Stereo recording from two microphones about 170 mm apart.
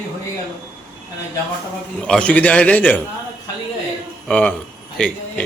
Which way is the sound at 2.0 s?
5° left (ahead or behind).